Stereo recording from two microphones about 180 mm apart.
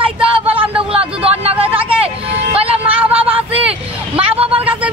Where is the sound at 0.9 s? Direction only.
35° right (ahead or behind).